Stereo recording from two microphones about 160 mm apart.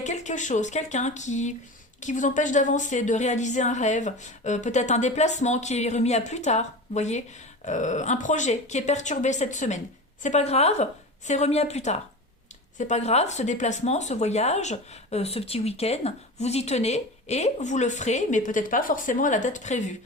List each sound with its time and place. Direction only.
0.0 s speech: 45° left (ahead or behind)